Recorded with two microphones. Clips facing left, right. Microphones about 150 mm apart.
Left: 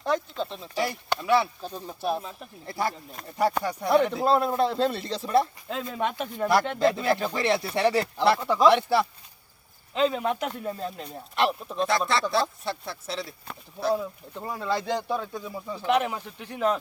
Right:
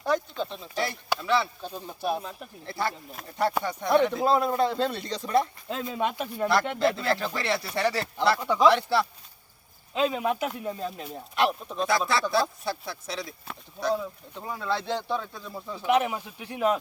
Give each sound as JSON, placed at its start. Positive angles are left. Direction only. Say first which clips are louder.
{"t": 0.0, "sound": "speech", "louder": "even", "side_deg": 0}
{"t": 1.2, "sound": "speech", "louder": "left 4 dB", "side_deg": 10}
{"t": 1.7, "sound": "speech", "louder": "even", "side_deg": 0}
{"t": 2.6, "sound": "speech", "louder": "left 1 dB", "side_deg": 10}
{"t": 6.7, "sound": "speech", "louder": "left 2 dB", "side_deg": 15}
{"t": 8.4, "sound": "speech", "louder": "even", "side_deg": 0}
{"t": 8.7, "sound": "speech", "louder": "left 2 dB", "side_deg": 15}
{"t": 9.9, "sound": "speech", "louder": "left 1 dB", "side_deg": -10}
{"t": 15.8, "sound": "speech", "louder": "right 1 dB", "side_deg": -5}